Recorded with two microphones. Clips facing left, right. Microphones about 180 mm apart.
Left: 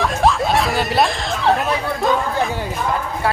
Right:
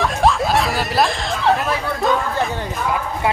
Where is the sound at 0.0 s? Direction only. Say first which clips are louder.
Even; centre (ahead or behind).